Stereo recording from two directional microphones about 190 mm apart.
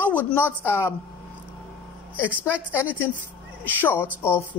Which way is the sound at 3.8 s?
10° left (ahead or behind).